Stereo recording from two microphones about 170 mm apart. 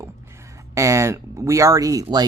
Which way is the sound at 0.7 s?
15° right (ahead or behind).